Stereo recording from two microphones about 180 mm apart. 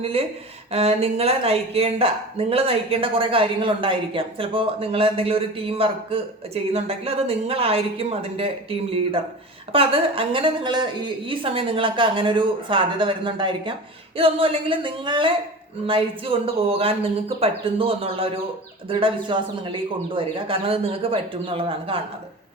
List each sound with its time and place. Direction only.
0.0 s speech: 30° right (ahead or behind)
9.7 s a woman's voice: 30° right (ahead or behind)